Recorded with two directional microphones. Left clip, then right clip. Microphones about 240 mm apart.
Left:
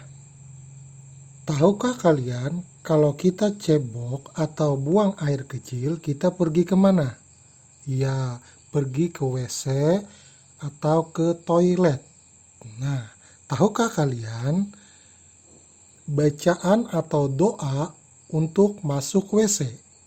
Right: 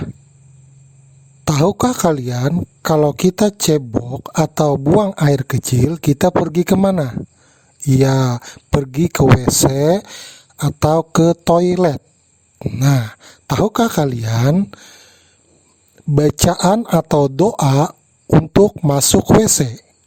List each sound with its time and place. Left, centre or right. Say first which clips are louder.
1.5 s speech: right 6 dB; right
16.1 s speech: right 7 dB; right